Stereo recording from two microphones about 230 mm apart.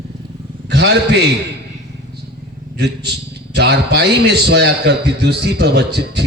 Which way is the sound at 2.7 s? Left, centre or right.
Right.